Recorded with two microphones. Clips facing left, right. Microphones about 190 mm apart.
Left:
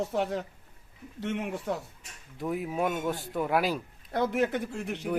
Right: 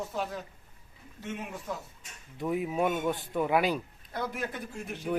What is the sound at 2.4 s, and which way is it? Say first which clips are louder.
Speech: right 1 dB; centre (ahead or behind).